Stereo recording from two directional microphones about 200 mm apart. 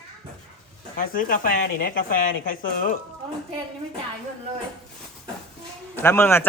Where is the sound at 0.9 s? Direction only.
45° left (ahead or behind).